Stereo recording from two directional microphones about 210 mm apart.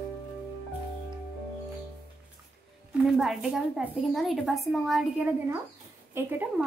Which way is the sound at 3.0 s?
Centre (ahead or behind).